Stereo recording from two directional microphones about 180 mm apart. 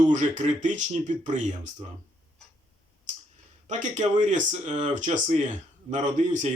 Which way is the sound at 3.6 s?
45° right (ahead or behind).